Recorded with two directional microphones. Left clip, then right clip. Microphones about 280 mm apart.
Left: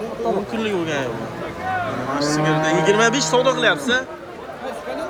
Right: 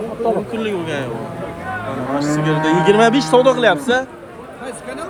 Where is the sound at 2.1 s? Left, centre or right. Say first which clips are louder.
Right 1 dB; centre.